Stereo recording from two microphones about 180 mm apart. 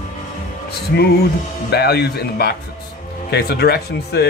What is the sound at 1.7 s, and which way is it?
Speech, 65° left (ahead or behind).